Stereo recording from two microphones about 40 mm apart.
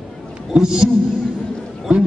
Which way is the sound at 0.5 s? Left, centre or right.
Centre.